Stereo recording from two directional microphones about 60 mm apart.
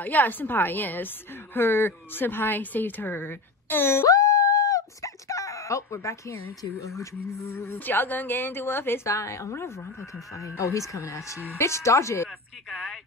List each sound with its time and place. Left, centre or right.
0.0 s a woman's voice: left
4.1 s dog: left
7.0 s a woman's voice: left
7.5 s a woman's voice: left
9.0 s a woman's voice: left